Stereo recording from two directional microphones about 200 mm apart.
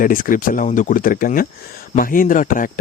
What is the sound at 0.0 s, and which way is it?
Speech, 45° left (ahead or behind).